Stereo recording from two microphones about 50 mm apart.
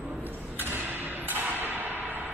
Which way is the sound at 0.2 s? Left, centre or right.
Right.